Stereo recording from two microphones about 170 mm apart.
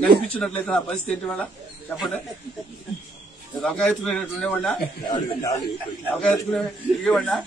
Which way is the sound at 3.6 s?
5° left (ahead or behind).